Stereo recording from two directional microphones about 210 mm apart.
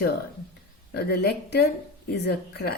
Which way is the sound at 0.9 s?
50° left (ahead or behind).